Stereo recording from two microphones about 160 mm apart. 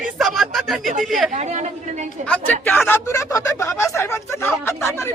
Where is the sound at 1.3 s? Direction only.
45° right (ahead or behind).